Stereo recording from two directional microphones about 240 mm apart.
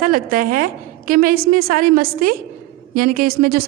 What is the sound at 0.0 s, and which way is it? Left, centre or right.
A woman's voice, right.